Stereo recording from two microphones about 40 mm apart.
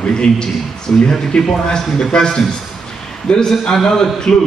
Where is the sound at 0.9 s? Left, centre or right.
Left.